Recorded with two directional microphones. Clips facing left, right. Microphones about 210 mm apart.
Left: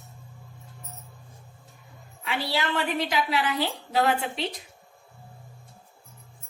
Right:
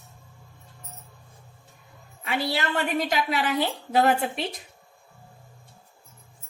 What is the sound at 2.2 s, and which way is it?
A woman's voice, 45° right (ahead or behind).